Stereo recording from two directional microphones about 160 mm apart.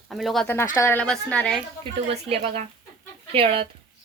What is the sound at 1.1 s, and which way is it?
Speech, 5° left (ahead or behind).